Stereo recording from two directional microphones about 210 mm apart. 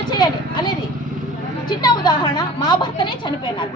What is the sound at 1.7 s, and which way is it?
A woman's voice, 20° left (ahead or behind).